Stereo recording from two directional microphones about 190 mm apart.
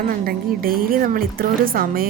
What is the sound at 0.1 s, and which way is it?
A woman's voice, 50° right (ahead or behind).